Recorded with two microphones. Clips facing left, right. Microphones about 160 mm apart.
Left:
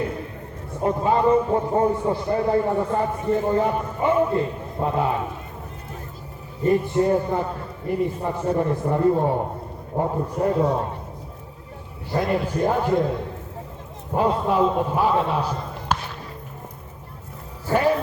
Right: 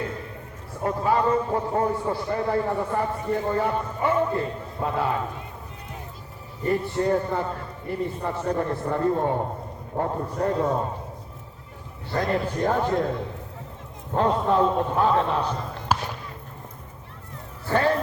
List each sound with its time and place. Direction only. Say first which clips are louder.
0.8 s a man's voice: left 3 dB; 20° left (ahead or behind)
6.7 s a man's voice: left 4 dB; 15° left (ahead or behind)
12.2 s a man's voice: left 2 dB; 5° left (ahead or behind)
14.1 s a man's voice: left 1 dB; 5° left (ahead or behind)
15.9 s basketball bounce: even; 5° right (ahead or behind)
17.7 s a sound: left 2 dB; 10° left (ahead or behind)